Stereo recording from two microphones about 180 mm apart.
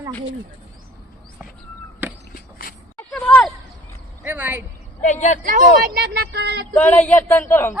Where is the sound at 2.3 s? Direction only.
55° left (ahead or behind).